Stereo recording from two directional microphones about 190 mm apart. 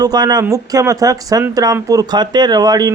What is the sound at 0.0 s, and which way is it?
Speech, 20° right (ahead or behind).